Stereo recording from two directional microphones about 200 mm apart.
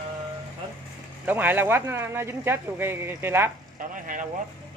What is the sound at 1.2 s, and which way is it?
Speech, 10° right (ahead or behind).